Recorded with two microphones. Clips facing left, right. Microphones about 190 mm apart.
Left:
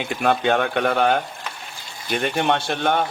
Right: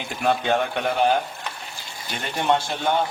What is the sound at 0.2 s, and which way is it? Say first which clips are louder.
Speech: left 2 dB; 65° left (ahead or behind).